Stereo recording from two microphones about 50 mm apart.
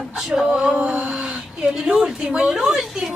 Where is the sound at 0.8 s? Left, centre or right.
Right.